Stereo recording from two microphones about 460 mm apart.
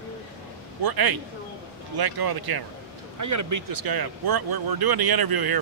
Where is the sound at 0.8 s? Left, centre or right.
Right.